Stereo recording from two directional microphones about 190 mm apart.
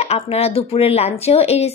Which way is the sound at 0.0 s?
30° left (ahead or behind).